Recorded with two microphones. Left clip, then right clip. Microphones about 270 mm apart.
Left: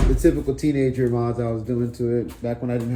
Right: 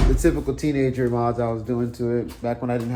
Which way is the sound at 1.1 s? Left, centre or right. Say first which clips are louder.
Right 2 dB; right.